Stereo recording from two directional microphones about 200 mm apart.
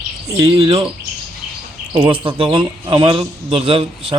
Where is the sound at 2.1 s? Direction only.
25° right (ahead or behind).